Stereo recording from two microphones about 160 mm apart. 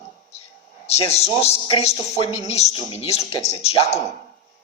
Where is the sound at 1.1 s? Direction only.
40° left (ahead or behind).